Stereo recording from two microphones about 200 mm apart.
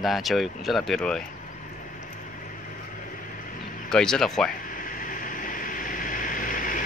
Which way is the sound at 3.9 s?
5° left (ahead or behind).